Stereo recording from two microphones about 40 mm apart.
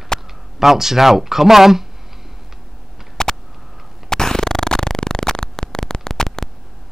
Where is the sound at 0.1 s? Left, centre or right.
Centre.